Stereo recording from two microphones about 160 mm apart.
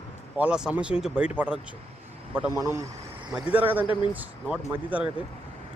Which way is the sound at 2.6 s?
15° right (ahead or behind).